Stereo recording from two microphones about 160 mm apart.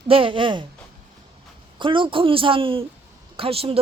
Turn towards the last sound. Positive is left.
turn(degrees=-35)  # may be behind; listen again after turning